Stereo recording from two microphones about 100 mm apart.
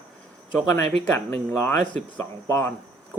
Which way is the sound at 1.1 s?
25° left (ahead or behind).